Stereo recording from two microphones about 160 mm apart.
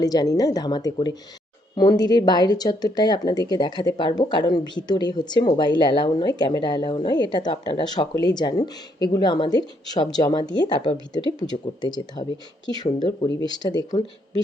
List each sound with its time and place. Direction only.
0.0 s speech: 25° left (ahead or behind)